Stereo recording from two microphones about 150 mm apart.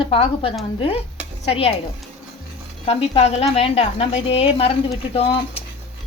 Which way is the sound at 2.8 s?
40° left (ahead or behind).